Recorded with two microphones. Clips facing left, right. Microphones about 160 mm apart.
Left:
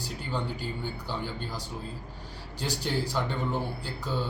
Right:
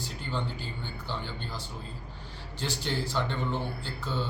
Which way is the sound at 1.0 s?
10° left (ahead or behind).